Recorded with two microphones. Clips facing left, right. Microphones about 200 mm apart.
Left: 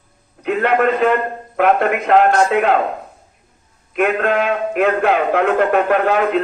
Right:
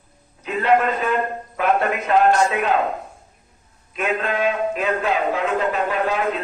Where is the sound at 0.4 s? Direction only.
60° left (ahead or behind).